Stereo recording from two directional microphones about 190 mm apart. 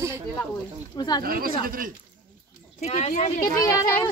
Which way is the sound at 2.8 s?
35° left (ahead or behind).